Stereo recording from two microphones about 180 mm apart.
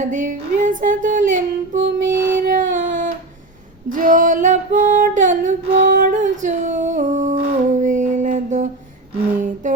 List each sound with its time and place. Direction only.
0.0 s female singing: 45° right (ahead or behind)
3.9 s music: 45° right (ahead or behind)
9.6 s humming: 45° right (ahead or behind)